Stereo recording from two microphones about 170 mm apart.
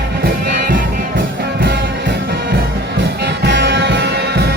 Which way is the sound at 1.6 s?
80° right.